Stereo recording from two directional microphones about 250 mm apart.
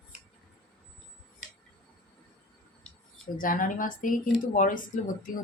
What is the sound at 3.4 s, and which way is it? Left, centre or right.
Speech, left.